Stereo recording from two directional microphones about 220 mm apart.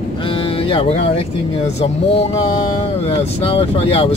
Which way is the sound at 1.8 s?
25° left (ahead or behind).